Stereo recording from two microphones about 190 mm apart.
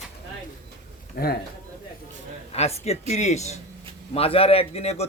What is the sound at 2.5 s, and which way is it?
A man's voice, 35° left (ahead or behind).